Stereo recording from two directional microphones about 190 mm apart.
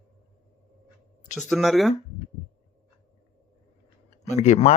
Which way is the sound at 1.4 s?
Centre (ahead or behind).